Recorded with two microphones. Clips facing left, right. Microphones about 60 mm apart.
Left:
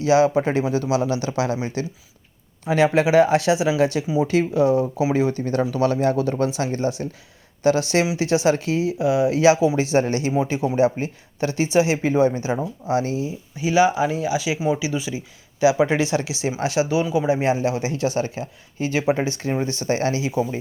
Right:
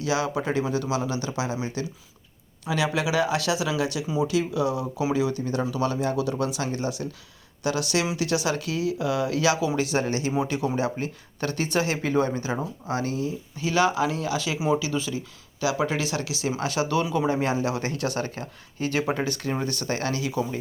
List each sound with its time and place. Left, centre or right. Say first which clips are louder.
0.0 s speech: left 9 dB; left
10.8 s speech: left 8 dB; left
12.9 s speech: left 6 dB; right
13.1 s speech: left 2 dB; centre
16.9 s speech: left 4 dB; centre
17.4 s speech: left 5 dB; left
19.1 s speech: left 4 dB; left